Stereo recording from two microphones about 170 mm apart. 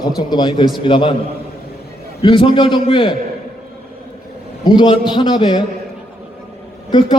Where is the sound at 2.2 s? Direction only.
30° left (ahead or behind).